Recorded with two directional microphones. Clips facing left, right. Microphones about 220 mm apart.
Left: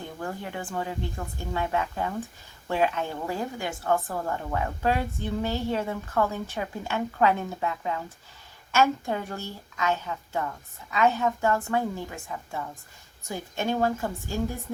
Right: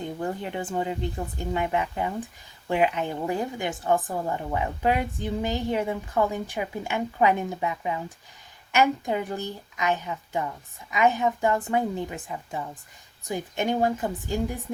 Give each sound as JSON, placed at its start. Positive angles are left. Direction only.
{"t": 0.0, "sound": "a woman's voice", "side_deg": -20}